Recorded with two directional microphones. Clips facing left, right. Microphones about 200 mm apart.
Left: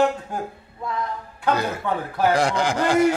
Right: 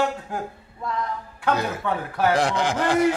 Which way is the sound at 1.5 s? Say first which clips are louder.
Left 1 dB; centre (ahead or behind).